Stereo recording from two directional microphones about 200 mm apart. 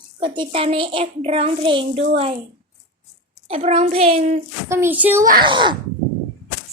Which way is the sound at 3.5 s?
30° right (ahead or behind).